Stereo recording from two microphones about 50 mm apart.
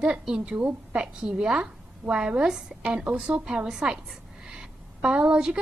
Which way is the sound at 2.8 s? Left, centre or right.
Right.